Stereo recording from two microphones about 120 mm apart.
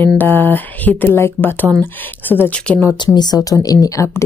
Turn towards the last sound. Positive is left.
turn(degrees=25)  # may be behind; listen again after turning